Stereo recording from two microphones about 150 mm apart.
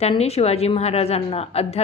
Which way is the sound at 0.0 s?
45° left (ahead or behind).